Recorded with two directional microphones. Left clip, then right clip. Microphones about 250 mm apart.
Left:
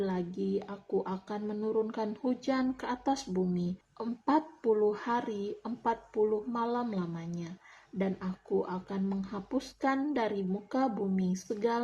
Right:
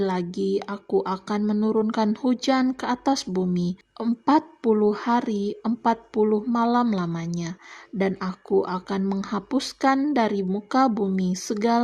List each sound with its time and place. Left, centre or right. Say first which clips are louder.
0.0 s speech: right 9 dB; right